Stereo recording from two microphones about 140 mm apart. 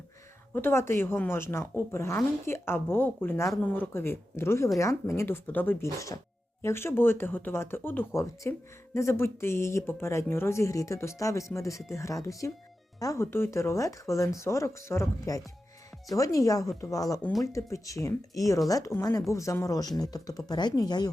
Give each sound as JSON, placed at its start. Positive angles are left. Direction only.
{"t": 0.5, "sound": "speech", "side_deg": 15}